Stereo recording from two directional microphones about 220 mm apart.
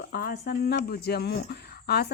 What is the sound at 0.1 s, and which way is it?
A woman's voice, 45° left (ahead or behind).